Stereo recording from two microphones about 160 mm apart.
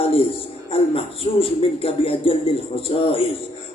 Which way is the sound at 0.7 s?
35° left (ahead or behind).